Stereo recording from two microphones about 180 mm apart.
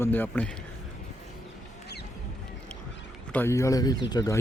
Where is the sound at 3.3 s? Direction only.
15° left (ahead or behind).